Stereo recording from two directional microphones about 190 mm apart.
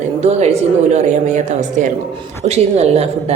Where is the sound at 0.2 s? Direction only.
35° right (ahead or behind).